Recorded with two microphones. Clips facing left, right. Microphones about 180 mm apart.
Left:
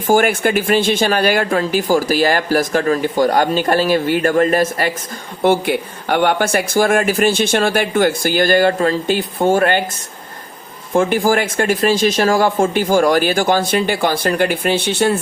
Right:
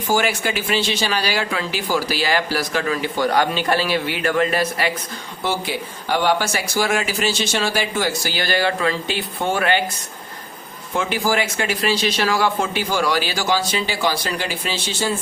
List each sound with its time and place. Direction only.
0.1 s speech: 50° left (ahead or behind)
10.9 s speech: 50° left (ahead or behind)